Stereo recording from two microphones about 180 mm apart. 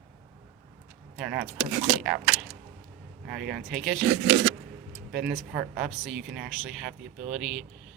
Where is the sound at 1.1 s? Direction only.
5° right (ahead or behind).